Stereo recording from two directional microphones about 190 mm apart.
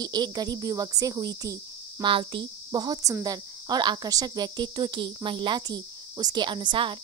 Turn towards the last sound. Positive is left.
turn(degrees=-25)  # may be behind; listen again after turning